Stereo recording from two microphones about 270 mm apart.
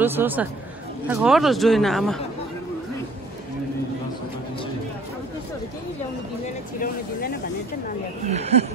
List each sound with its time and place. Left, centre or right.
0.0 s speech: centre
6.8 s vehicle: left
8.3 s speech: right